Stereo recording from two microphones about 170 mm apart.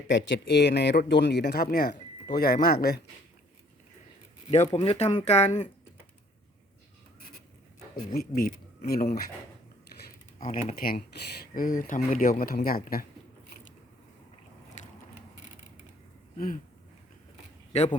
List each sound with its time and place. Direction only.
0.1 s speech: 90° left
2.3 s speech: 65° left (ahead or behind)
4.5 s speech: 40° left (ahead or behind)
8.4 s speech: 55° left (ahead or behind)
10.4 s speech: 50° left (ahead or behind)
17.7 s a sound: 40° left (ahead or behind)